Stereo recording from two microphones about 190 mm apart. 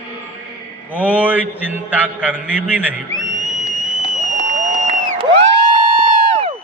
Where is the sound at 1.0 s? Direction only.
5° right (ahead or behind).